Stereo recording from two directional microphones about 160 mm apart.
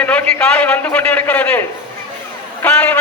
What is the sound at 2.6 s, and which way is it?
Speech, 10° left (ahead or behind).